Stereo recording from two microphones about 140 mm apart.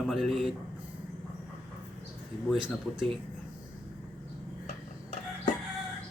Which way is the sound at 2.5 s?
35° right (ahead or behind).